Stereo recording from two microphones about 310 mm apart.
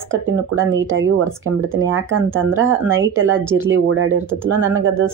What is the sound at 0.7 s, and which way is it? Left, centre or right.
Speech, right.